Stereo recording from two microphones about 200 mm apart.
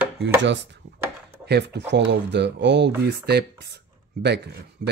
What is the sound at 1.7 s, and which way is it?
Speech, 60° right (ahead or behind).